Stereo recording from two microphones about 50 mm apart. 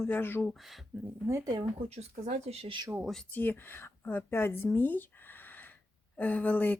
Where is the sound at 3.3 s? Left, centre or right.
Left.